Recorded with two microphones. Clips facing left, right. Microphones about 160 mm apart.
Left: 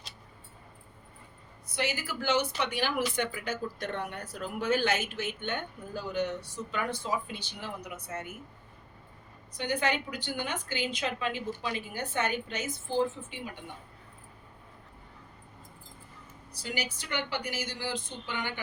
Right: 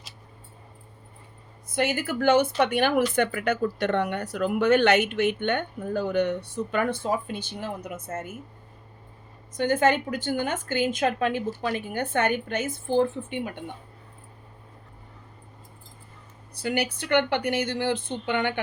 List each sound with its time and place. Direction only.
1.6 s speech: 55° right (ahead or behind)
9.6 s speech: 50° right (ahead or behind)
16.6 s speech: 55° right (ahead or behind)